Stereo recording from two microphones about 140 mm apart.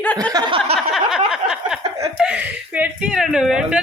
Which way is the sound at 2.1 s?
5° right (ahead or behind).